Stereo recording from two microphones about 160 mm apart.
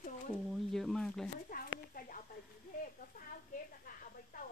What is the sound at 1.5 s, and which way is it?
Speech, 65° left (ahead or behind).